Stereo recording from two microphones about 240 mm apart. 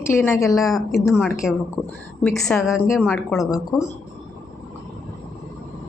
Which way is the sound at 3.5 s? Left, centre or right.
Centre.